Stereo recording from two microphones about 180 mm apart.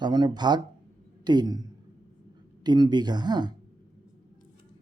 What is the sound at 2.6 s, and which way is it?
Speech, 25° right (ahead or behind).